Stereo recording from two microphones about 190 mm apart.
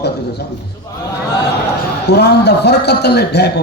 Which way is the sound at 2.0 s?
60° left (ahead or behind).